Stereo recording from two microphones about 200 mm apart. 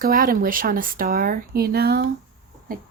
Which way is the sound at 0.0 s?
45° right (ahead or behind).